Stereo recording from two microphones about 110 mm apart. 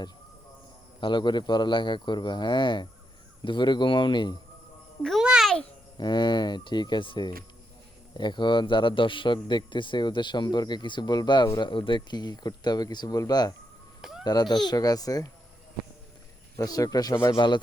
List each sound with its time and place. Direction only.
1.0 s a man's voice: 45° left (ahead or behind)
5.0 s music: 5° right (ahead or behind)
6.0 s a man's voice: 45° left (ahead or behind)
11.7 s speech: 50° left (ahead or behind)
14.0 s babbling: 5° right (ahead or behind)
14.3 s speech: 40° left (ahead or behind)
16.6 s speech: 35° left (ahead or behind)
17.3 s a man's voice: 45° left (ahead or behind)